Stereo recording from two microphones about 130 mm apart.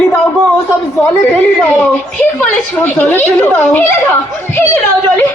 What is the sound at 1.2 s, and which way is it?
Speech, 15° left (ahead or behind).